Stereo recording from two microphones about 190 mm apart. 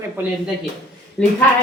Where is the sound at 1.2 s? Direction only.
Centre (ahead or behind).